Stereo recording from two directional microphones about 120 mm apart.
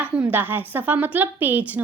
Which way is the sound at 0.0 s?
10° right (ahead or behind).